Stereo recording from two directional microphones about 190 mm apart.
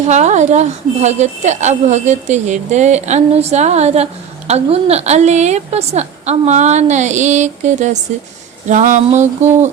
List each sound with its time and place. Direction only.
0.0 s speech: 35° right (ahead or behind)